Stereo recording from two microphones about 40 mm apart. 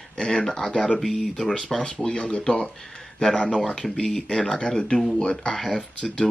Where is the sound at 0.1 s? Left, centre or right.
Left.